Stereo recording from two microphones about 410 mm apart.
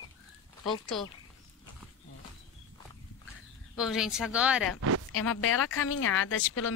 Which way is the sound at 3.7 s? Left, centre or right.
Centre.